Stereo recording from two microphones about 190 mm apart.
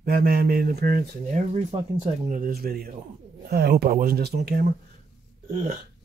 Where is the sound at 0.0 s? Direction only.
50° right (ahead or behind).